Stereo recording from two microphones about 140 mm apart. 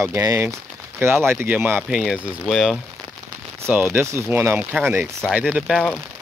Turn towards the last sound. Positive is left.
turn(degrees=-5)  # may be behind; listen again after turning